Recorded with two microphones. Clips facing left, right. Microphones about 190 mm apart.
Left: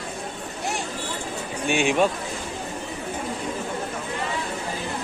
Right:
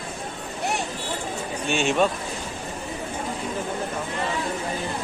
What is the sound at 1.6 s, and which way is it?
Speech, 15° left (ahead or behind).